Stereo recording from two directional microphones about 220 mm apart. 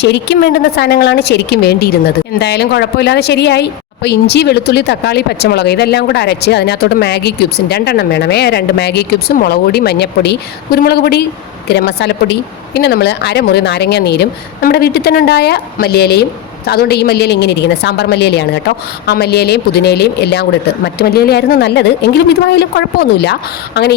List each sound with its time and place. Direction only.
0.0 s speech: 50° left (ahead or behind)